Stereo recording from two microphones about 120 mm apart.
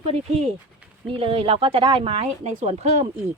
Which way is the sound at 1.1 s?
50° right (ahead or behind).